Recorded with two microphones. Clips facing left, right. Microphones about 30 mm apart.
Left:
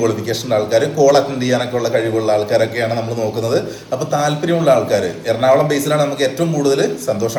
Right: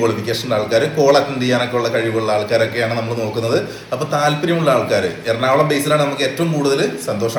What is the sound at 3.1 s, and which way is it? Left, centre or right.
A man's voice, right.